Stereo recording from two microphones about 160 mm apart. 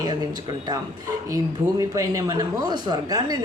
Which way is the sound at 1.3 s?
20° right (ahead or behind).